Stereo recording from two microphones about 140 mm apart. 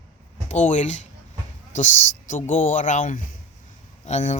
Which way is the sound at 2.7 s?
60° left (ahead or behind).